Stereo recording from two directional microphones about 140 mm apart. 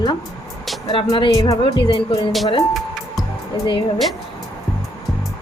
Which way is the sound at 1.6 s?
35° left (ahead or behind).